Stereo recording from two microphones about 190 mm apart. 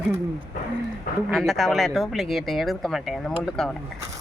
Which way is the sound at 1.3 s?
Centre (ahead or behind).